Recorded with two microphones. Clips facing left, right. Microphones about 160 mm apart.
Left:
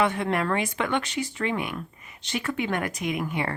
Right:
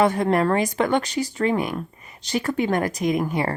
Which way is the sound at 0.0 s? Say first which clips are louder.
Right 6 dB; 40° right (ahead or behind).